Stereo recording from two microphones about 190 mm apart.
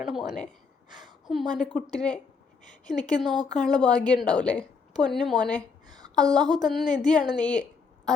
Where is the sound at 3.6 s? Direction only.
5° left (ahead or behind).